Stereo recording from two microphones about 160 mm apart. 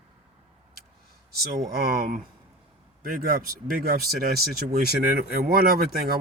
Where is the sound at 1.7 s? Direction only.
70° right (ahead or behind).